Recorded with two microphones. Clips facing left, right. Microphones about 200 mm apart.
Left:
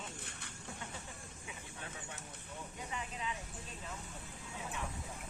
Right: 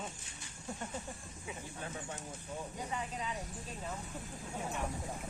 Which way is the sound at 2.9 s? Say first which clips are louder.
Right 1 dB; 40° right (ahead or behind).